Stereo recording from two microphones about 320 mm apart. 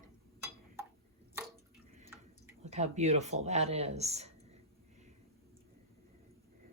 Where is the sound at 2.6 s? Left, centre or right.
Right.